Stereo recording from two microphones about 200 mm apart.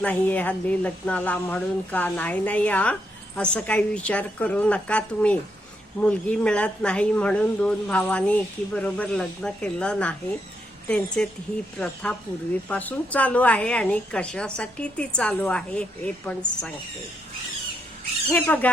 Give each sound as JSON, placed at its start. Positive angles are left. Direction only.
{"t": 0.0, "sound": "speech", "side_deg": 10}
{"t": 18.3, "sound": "speech", "side_deg": 5}